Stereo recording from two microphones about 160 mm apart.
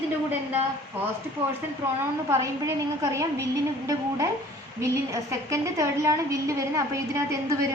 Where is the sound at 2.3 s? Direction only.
20° right (ahead or behind).